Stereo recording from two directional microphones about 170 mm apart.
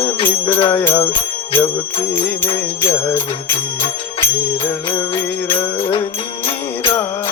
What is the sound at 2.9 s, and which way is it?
Music, 15° left (ahead or behind).